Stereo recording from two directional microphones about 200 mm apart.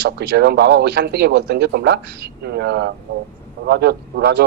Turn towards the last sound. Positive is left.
turn(degrees=-60)  # may be behind; listen again after turning